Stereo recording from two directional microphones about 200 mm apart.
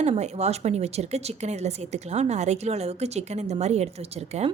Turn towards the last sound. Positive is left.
turn(degrees=-30)  # may be behind; listen again after turning